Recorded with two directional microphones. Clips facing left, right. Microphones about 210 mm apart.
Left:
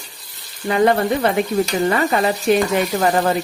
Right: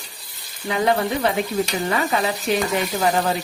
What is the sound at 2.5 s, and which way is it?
Speech, 55° left (ahead or behind).